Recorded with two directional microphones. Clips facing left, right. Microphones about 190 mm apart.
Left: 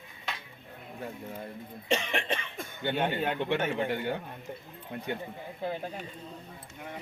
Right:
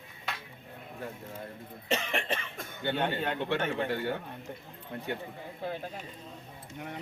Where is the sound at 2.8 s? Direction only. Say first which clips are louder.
Left 1 dB; 15° left (ahead or behind).